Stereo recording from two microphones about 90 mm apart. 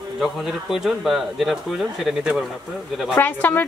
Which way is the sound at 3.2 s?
20° left (ahead or behind).